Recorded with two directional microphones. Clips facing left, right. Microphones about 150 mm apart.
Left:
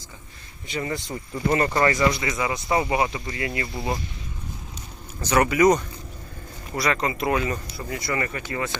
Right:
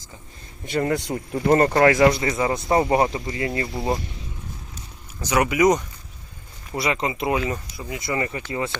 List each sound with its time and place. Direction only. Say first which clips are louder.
0.6 s speech: right 6 dB; 55° right (ahead or behind)
2.2 s speech: right 4 dB; 35° right (ahead or behind)
5.2 s speech: even; 10° right (ahead or behind)